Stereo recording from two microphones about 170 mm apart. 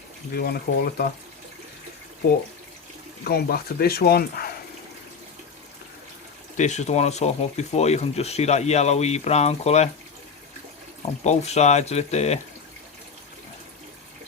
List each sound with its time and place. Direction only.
0.3 s speech: 65° left (ahead or behind)
3.2 s speech: 65° left (ahead or behind)
6.6 s speech: 45° left (ahead or behind)
11.2 s speech: 40° left (ahead or behind)